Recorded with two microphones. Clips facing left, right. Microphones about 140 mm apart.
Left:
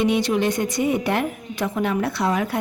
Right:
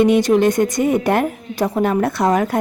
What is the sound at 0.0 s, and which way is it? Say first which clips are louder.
A woman's voice: right 7 dB; 45° right (ahead or behind).